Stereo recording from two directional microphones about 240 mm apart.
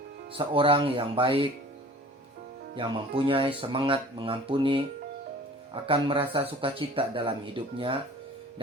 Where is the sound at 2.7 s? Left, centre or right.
Right.